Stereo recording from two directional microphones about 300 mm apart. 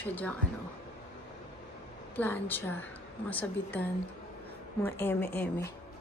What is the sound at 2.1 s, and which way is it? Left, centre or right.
A woman's voice, centre.